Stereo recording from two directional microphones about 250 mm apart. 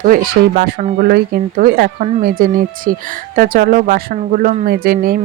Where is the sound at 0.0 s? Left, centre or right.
Right.